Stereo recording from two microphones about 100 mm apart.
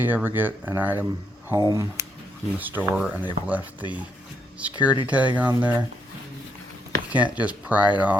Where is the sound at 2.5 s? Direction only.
20° right (ahead or behind).